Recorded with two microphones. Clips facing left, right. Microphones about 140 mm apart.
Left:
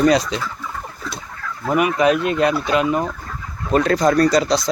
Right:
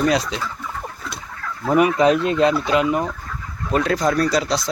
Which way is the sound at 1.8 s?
30° right (ahead or behind).